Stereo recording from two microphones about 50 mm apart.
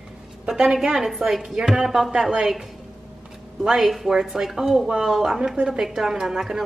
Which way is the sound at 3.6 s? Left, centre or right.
Centre.